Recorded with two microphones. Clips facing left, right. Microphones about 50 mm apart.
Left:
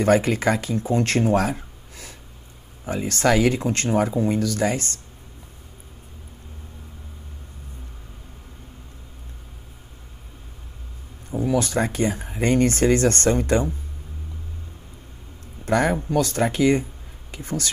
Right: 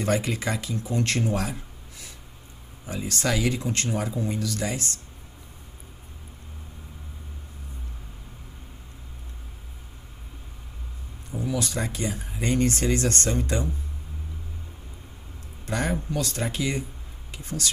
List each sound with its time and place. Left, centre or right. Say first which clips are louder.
0.0 s speech: left 7 dB; left
2.8 s speech: left 7 dB; left
11.5 s speech: left 8 dB; left
15.6 s speech: left 7 dB; left